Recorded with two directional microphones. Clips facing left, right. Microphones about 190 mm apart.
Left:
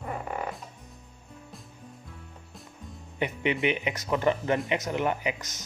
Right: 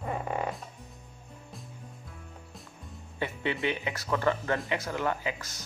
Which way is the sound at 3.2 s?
20° left (ahead or behind).